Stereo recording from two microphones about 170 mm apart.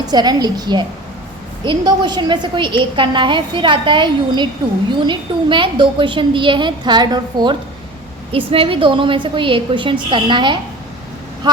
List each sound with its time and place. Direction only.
0.0 s a woman's voice: 25° right (ahead or behind)